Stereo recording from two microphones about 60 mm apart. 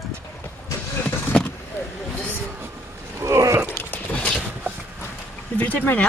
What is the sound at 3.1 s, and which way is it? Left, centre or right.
Biting, right.